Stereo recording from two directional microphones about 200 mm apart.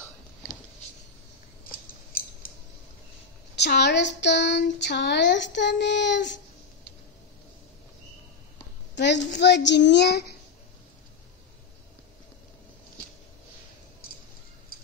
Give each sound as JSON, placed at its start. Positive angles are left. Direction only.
{"t": 2.1, "sound": "a sound", "side_deg": 45}
{"t": 3.6, "sound": "speech", "side_deg": 55}
{"t": 8.9, "sound": "speech", "side_deg": 60}